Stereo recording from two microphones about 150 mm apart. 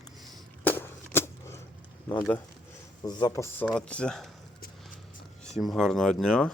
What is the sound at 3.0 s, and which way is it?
Speech, 30° left (ahead or behind).